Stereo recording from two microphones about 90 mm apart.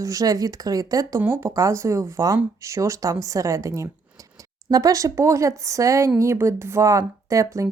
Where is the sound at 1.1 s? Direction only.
25° right (ahead or behind).